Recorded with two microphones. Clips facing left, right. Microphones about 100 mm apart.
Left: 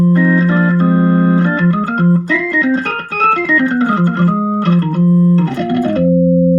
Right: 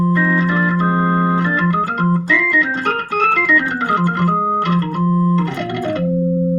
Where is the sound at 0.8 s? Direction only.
40° right (ahead or behind).